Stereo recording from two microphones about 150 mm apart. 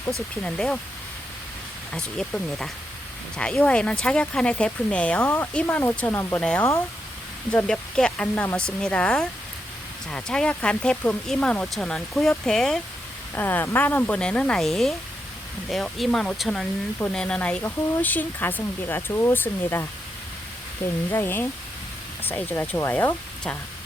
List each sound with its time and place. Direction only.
0.4 s speech: 5° left (ahead or behind)
1.9 s speech: 5° left (ahead or behind)
21.1 s speech: 15° left (ahead or behind)